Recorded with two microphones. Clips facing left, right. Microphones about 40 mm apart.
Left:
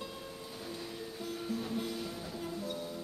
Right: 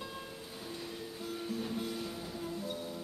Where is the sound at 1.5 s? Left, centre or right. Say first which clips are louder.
Left 1 dB; centre.